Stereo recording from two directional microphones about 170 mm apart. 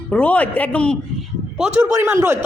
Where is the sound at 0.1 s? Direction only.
10° left (ahead or behind).